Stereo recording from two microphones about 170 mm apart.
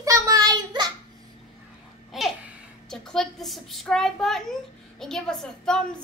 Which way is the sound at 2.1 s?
Centre (ahead or behind).